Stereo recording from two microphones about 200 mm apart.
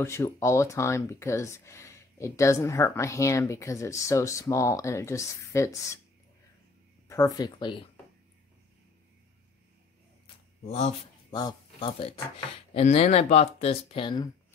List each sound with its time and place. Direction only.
0.0 s speech: 15° left (ahead or behind)
7.1 s speech: 15° left (ahead or behind)
10.2 s a sound: 35° left (ahead or behind)
11.2 s speech: 20° left (ahead or behind)